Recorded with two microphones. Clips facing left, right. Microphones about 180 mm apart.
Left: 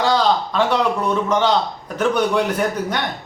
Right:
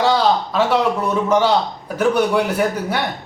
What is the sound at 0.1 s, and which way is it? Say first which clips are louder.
A man's voice: right 1 dB; 5° right (ahead or behind).